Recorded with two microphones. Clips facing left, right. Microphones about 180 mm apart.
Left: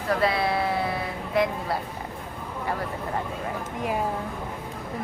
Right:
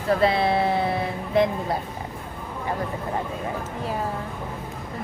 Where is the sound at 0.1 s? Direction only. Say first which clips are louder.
Right 4 dB; 25° right (ahead or behind).